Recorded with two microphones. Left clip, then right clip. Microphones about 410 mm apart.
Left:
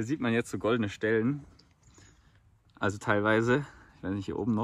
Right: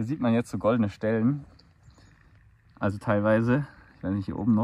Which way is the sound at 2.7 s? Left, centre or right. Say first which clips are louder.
Right 1 dB; centre.